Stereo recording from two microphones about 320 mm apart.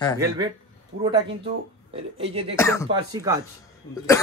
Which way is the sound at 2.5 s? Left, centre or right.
Centre.